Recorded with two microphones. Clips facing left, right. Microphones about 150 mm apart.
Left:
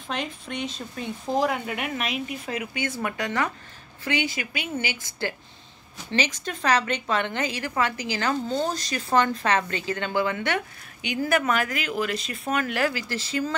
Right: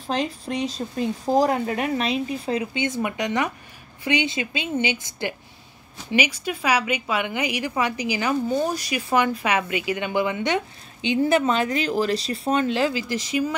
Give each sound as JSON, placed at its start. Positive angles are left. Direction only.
{"t": 0.0, "sound": "a woman's voice", "side_deg": -35}